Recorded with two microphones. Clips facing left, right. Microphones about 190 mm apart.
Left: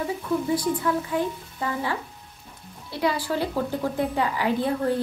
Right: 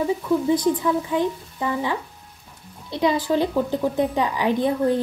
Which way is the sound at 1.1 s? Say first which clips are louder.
Right 4 dB; 15° right (ahead or behind).